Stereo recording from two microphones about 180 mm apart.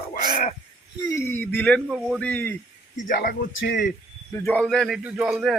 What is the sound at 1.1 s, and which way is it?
Speech, 10° left (ahead or behind).